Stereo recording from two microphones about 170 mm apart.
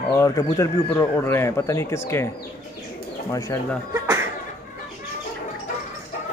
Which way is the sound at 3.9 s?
15° right (ahead or behind).